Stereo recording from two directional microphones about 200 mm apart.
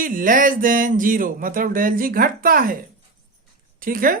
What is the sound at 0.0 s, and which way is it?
Speech, 45° right (ahead or behind).